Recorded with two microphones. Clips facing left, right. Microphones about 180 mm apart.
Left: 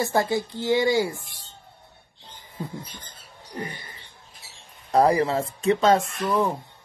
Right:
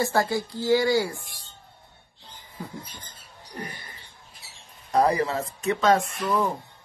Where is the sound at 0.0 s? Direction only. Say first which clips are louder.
Left 1 dB; 20° left (ahead or behind).